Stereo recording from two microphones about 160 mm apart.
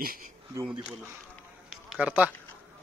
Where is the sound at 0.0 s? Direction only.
65° right (ahead or behind).